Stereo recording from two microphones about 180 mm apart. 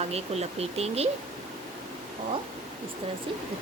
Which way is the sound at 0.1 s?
35° right (ahead or behind).